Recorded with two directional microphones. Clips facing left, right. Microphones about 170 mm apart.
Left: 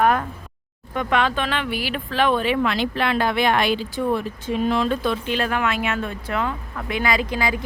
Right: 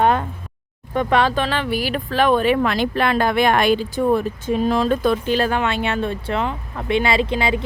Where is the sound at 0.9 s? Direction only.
35° right (ahead or behind).